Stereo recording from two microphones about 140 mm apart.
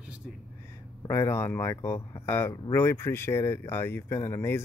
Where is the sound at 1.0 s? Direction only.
15° left (ahead or behind).